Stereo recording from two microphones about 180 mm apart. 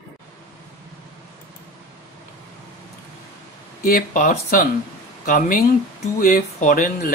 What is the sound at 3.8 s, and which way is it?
Speech, 55° left (ahead or behind).